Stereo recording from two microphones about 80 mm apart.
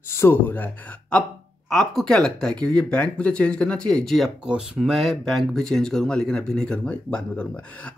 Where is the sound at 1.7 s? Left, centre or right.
Centre.